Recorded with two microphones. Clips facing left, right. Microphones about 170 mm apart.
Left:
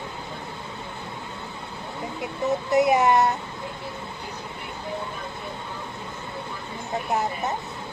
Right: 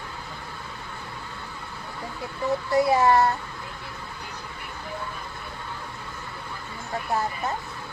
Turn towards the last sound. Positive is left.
turn(degrees=20)  # may be behind; listen again after turning